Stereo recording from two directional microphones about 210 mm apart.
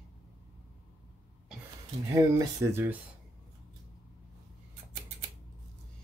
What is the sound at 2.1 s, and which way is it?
Speech, 15° right (ahead or behind).